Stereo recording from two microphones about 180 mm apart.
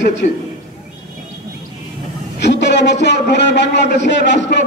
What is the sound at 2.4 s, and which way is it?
A man's voice, 75° left (ahead or behind).